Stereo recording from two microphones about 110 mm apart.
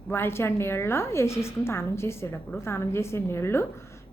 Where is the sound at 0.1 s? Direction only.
20° left (ahead or behind).